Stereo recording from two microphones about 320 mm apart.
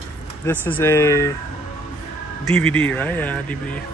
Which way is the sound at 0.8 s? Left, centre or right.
Centre.